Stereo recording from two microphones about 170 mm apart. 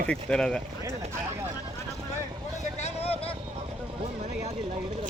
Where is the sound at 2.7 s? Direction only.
40° left (ahead or behind).